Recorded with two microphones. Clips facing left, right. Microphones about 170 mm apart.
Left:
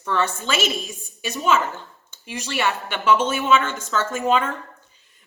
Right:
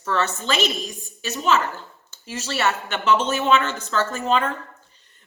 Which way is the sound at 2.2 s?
15° left (ahead or behind).